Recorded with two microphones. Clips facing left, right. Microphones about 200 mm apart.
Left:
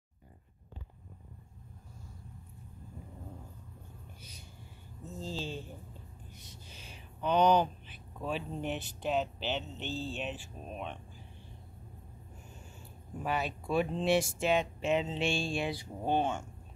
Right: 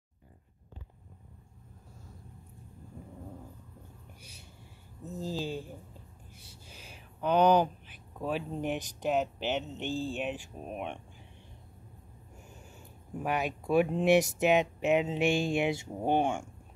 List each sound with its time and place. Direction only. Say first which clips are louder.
5.0 s speech: right 4 dB; 15° right (ahead or behind)
6.6 s a sound: right 4 dB; 5° right (ahead or behind)
9.5 s speech: right 4 dB; 15° right (ahead or behind)
13.2 s speech: right 2 dB; 15° right (ahead or behind)